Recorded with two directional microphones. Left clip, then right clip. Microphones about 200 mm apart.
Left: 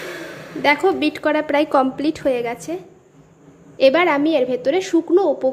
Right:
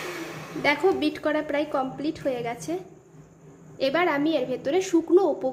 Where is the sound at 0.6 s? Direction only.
15° left (ahead or behind).